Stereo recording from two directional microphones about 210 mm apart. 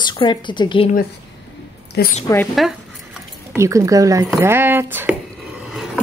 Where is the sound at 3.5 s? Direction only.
15° right (ahead or behind).